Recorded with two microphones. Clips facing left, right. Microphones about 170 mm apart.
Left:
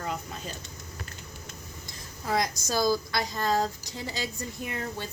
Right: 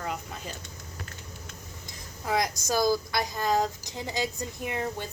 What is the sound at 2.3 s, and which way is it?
A woman's voice, 15° right (ahead or behind).